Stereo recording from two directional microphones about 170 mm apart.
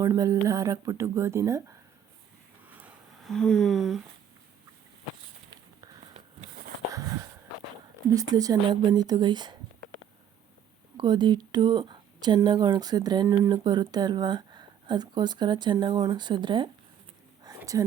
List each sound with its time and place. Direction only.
0.0 s speech: 15° right (ahead or behind)
2.6 s a sound: 10° right (ahead or behind)
3.2 s speech: 5° left (ahead or behind)
8.1 s speech: 20° right (ahead or behind)
10.9 s speech: 25° right (ahead or behind)
17.6 s whispering: 20° right (ahead or behind)